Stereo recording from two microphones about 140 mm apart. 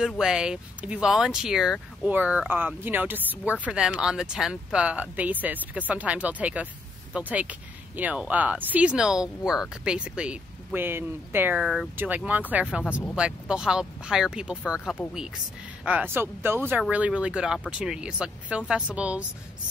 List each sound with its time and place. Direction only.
0.0 s speech: 5° right (ahead or behind)